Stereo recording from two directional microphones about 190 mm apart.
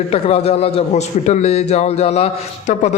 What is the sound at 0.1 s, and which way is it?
A man's voice, 35° left (ahead or behind).